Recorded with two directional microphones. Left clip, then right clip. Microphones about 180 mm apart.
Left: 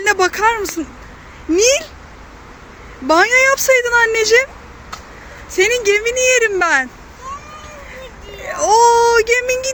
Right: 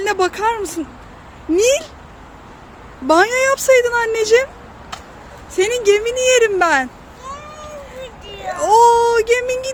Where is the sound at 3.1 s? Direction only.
10° right (ahead or behind).